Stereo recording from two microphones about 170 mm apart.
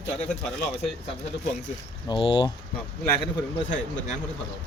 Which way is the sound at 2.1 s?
30° left (ahead or behind).